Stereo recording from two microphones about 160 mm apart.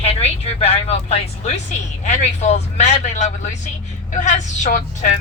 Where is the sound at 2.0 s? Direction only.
45° left (ahead or behind).